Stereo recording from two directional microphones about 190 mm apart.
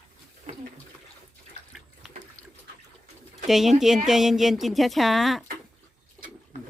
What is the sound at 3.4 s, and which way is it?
Speech, centre (ahead or behind).